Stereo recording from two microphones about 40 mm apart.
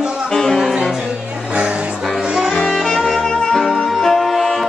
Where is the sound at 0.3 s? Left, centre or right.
Centre.